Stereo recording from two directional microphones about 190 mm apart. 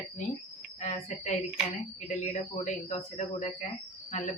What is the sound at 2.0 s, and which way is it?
Speech, 40° left (ahead or behind).